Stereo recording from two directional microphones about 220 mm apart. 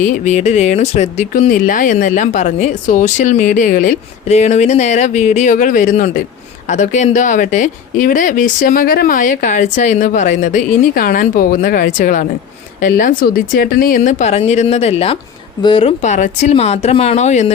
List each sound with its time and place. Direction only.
0.0 s speech: 35° left (ahead or behind)